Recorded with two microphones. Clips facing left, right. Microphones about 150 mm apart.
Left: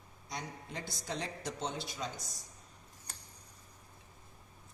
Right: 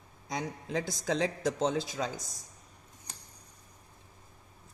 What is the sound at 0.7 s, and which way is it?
A man's voice, 90° right.